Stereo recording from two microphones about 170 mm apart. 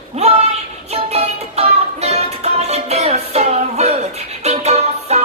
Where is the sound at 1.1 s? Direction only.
40° right (ahead or behind).